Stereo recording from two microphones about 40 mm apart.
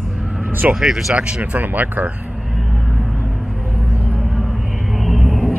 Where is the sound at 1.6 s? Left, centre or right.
Right.